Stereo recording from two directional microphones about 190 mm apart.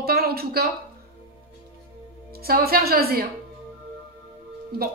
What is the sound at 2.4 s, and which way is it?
Speech, 55° right (ahead or behind).